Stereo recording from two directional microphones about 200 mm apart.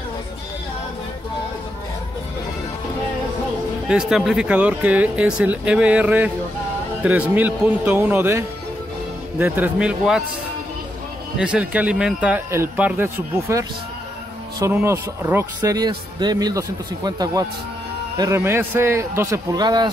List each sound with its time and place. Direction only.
3.9 s speech: 5° right (ahead or behind)
11.3 s speech: 5° right (ahead or behind)